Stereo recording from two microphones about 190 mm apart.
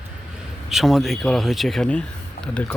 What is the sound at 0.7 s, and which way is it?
Speech, centre (ahead or behind).